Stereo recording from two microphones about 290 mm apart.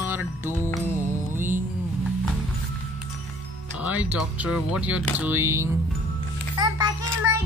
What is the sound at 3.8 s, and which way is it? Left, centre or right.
Speech, centre.